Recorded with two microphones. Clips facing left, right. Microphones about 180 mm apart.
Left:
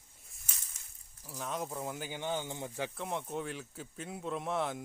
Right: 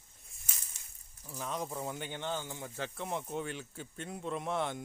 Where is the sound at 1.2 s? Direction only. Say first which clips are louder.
Even; centre (ahead or behind).